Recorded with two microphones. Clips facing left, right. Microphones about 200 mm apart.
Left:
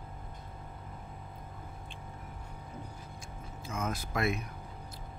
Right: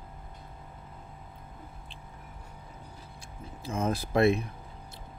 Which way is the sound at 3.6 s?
30° right (ahead or behind).